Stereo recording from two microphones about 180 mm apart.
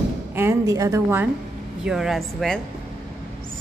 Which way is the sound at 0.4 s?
15° right (ahead or behind).